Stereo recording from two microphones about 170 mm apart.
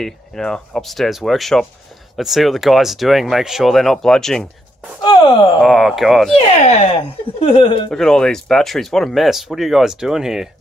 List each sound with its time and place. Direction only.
0.0 s speech: 5° left (ahead or behind)
5.5 s speech: centre (ahead or behind)
6.3 s speech: 40° left (ahead or behind)
7.9 s speech: 5° left (ahead or behind)